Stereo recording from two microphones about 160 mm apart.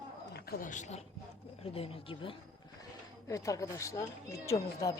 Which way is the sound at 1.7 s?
35° left (ahead or behind).